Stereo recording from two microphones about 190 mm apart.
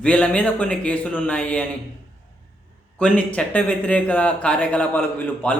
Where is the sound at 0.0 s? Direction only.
5° left (ahead or behind).